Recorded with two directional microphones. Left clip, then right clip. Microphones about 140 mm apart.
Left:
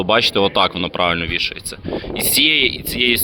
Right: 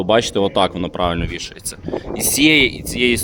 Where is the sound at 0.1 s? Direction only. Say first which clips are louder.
Left 1 dB; 30° right (ahead or behind).